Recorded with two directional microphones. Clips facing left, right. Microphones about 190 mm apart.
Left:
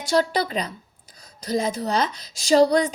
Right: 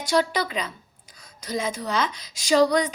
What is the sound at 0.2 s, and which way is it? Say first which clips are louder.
Speech: left 3 dB; 35° left (ahead or behind).